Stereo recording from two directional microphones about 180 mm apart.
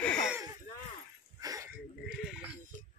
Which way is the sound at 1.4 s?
20° right (ahead or behind).